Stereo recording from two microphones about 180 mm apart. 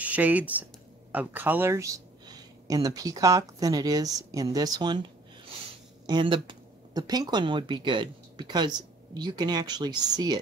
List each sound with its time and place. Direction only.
0.0 s speech: 10° right (ahead or behind)